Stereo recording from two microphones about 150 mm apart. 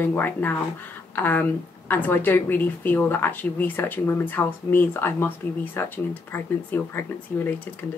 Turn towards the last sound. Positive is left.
turn(degrees=15)  # may be behind; listen again after turning